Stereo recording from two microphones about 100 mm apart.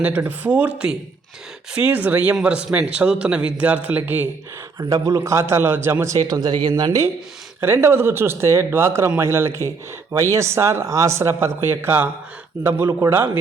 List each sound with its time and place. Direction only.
0.3 s a man's voice: 15° right (ahead or behind)
1.7 s a man's voice: 15° right (ahead or behind)
4.8 s speech: 35° right (ahead or behind)
6.1 s speech: 40° right (ahead or behind)
7.6 s speech: 25° right (ahead or behind)